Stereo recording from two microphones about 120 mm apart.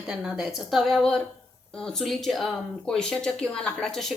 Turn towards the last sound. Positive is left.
turn(degrees=5)  # may be behind; listen again after turning